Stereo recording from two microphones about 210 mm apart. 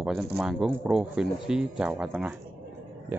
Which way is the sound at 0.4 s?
5° right (ahead or behind).